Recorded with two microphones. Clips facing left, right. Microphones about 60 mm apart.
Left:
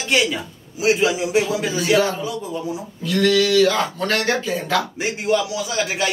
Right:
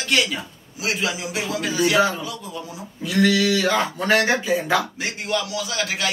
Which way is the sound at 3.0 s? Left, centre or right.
Centre.